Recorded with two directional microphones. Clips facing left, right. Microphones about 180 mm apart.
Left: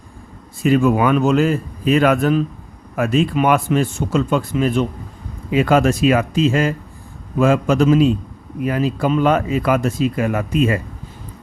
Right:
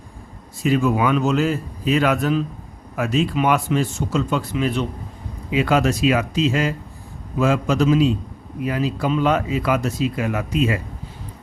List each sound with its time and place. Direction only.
0.6 s a man's voice: 55° left (ahead or behind)